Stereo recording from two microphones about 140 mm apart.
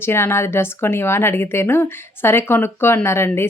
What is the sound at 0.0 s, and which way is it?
A woman's voice, 15° left (ahead or behind).